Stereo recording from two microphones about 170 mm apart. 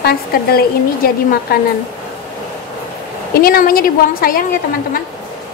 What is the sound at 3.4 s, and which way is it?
A woman's voice, 60° left (ahead or behind).